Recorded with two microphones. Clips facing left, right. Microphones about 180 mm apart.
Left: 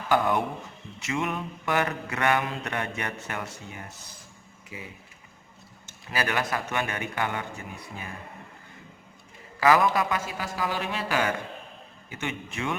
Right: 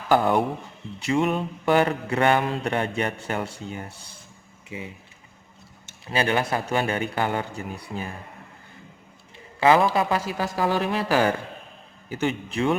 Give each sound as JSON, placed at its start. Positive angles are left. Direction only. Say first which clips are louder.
{"t": 0.1, "sound": "mantra", "louder": "right 4 dB", "side_deg": -30}
{"t": 4.7, "sound": "a man's voice", "louder": "right 6 dB", "side_deg": -25}
{"t": 6.1, "sound": "mantra", "louder": "right 5 dB", "side_deg": -30}
{"t": 9.6, "sound": "a man's voice", "louder": "right 3 dB", "side_deg": -25}
{"t": 10.3, "sound": "mantra", "louder": "right 6 dB", "side_deg": -45}